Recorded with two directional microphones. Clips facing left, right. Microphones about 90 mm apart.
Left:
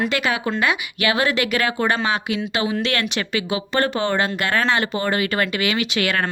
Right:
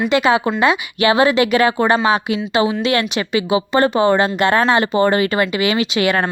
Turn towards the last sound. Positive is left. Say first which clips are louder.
# right 5 dB
turn(degrees=-25)  # may be behind; listen again after turning